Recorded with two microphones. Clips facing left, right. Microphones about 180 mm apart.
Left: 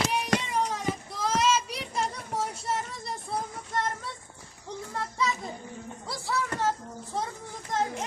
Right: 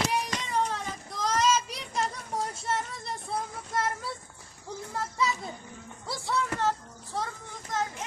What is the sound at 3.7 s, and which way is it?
Child singing, 5° right (ahead or behind).